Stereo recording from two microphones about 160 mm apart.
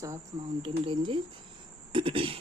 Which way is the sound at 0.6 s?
30° right (ahead or behind).